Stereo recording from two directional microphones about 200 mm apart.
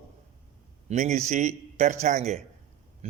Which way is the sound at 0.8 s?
35° right (ahead or behind).